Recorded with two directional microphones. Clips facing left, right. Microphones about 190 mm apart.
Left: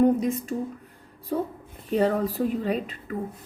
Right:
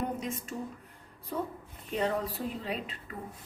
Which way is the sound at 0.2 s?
35° left (ahead or behind).